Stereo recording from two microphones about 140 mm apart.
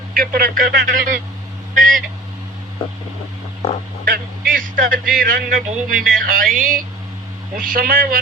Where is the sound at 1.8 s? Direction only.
85° right.